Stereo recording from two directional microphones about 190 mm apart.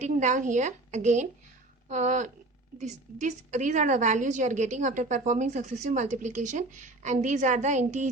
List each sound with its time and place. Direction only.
0.0 s a woman's voice: 40° right (ahead or behind)